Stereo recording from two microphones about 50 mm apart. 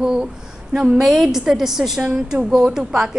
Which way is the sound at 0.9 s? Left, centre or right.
Centre.